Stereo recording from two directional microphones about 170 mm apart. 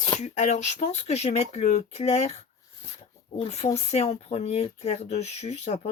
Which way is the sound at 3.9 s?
40° left (ahead or behind).